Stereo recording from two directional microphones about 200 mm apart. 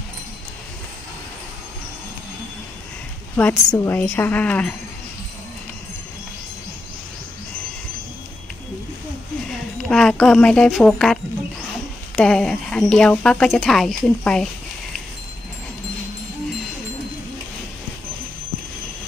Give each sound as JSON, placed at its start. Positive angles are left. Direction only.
{"t": 3.3, "sound": "a woman's voice", "side_deg": 10}
{"t": 9.5, "sound": "speech", "side_deg": 0}
{"t": 12.2, "sound": "speech", "side_deg": 0}